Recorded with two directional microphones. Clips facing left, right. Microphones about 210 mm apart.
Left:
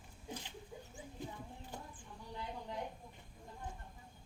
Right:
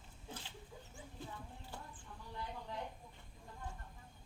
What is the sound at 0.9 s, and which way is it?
Clip-clop, 15° left (ahead or behind).